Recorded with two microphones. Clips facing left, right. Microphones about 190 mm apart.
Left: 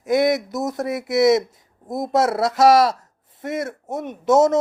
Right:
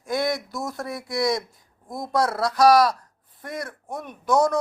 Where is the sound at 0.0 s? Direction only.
20° left (ahead or behind).